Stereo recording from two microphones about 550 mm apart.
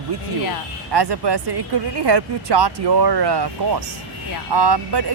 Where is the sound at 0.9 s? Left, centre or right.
Right.